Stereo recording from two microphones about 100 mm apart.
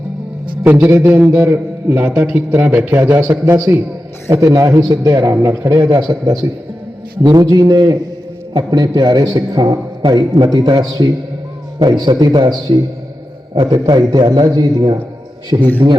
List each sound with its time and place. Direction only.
0.6 s a man's voice: 20° right (ahead or behind)
4.3 s a man's voice: 40° right (ahead or behind)
15.5 s a man's voice: 50° right (ahead or behind)